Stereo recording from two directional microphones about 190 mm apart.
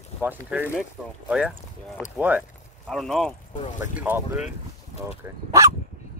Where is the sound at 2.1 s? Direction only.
10° right (ahead or behind).